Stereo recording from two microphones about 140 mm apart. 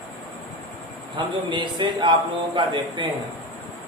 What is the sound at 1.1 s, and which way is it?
A man's voice, 35° right (ahead or behind).